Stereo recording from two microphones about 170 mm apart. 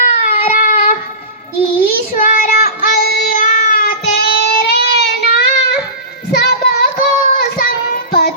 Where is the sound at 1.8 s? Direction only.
50° left (ahead or behind).